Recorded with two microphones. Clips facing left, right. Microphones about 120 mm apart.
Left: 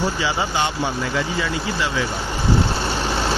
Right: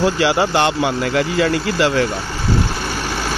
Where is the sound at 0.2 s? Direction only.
70° right (ahead or behind).